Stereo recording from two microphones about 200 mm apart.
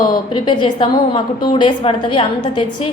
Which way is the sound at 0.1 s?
25° left (ahead or behind).